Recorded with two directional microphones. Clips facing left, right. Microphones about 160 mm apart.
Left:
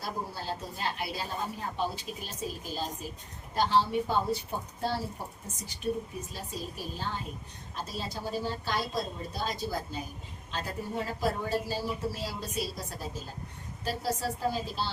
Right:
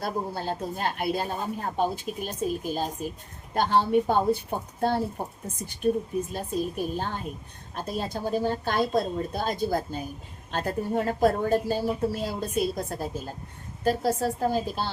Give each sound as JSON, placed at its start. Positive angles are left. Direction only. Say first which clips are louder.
{"t": 0.0, "sound": "a woman's voice", "louder": "right 6 dB", "side_deg": -55}